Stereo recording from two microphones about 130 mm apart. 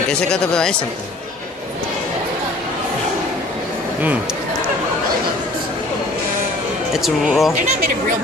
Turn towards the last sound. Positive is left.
turn(degrees=0)  # may be behind; listen again after turning